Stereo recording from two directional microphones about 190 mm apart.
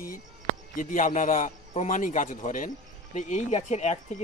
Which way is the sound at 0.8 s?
45° left (ahead or behind).